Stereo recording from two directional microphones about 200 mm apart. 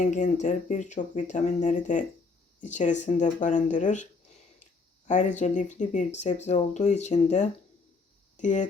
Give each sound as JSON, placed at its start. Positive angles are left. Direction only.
{"t": 0.0, "sound": "speech", "side_deg": 40}